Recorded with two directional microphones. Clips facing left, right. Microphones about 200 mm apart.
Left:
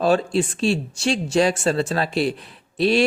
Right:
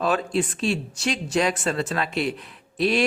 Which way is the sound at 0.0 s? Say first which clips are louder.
Left 4 dB; 30° left (ahead or behind).